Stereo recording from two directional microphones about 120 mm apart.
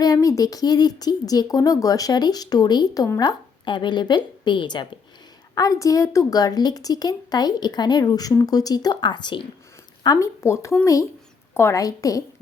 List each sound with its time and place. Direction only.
0.0 s a woman's voice: 30° left (ahead or behind)
5.5 s a woman's voice: 30° left (ahead or behind)
10.0 s speech: 30° left (ahead or behind)